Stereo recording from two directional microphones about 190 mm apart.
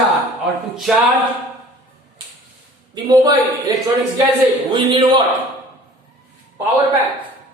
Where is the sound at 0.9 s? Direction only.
Centre (ahead or behind).